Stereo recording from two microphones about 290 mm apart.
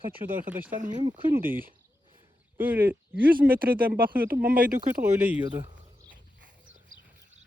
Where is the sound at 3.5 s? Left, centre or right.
Right.